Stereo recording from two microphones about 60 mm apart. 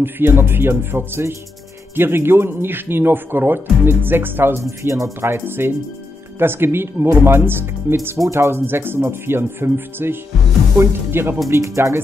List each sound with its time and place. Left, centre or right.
0.0 s speech: right
4.6 s speech: right
5.3 s speech: right
8.2 s speech: right
11.5 s speech: right